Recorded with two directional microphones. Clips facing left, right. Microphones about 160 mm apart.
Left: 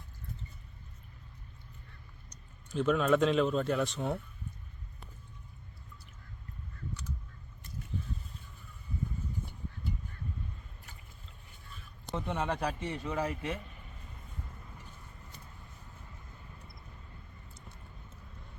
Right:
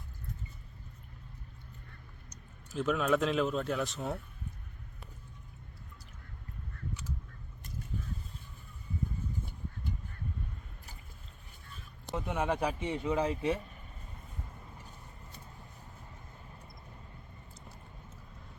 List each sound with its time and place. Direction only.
2.7 s speech: centre (ahead or behind)
12.1 s speech: 10° right (ahead or behind); by 13.6 s 25° right (ahead or behind)